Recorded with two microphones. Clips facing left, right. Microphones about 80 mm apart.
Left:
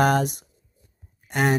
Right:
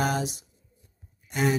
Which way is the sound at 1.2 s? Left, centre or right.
Left.